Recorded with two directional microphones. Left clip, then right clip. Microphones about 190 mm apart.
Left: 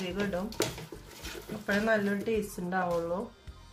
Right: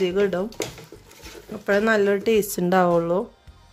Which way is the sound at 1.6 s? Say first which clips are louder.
Right 9 dB; 60° right (ahead or behind).